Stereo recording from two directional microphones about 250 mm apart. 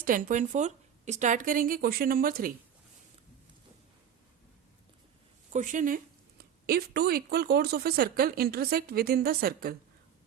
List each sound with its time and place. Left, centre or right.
0.0 s speech: right
5.5 s speech: right